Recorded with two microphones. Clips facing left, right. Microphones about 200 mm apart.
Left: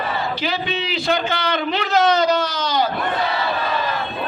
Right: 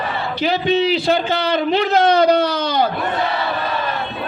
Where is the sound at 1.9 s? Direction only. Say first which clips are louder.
Right 2 dB; 55° right (ahead or behind).